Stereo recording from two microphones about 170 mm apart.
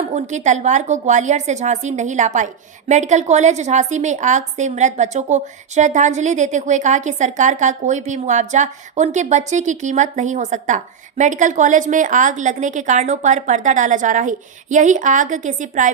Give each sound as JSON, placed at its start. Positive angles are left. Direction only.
{"t": 0.1, "sound": "a woman's voice", "side_deg": -45}